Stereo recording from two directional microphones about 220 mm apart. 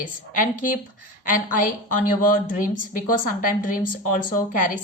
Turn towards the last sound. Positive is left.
turn(degrees=35)  # may be behind; listen again after turning